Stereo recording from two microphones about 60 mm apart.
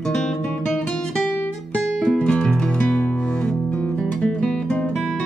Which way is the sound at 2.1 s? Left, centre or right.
Centre.